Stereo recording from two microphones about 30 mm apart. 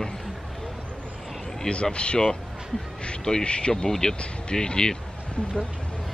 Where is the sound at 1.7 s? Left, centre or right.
Left.